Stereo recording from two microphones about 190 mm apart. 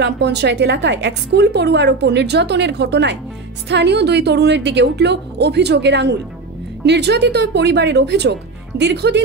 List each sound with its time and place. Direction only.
0.0 s a woman's voice: 60° right (ahead or behind)